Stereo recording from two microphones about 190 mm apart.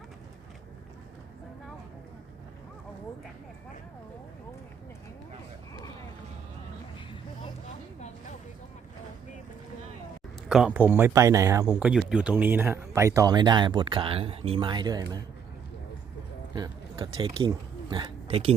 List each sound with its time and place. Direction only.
10.5 s speech: 5° right (ahead or behind); by 15.2 s 20° right (ahead or behind)
16.6 s speech: 20° right (ahead or behind)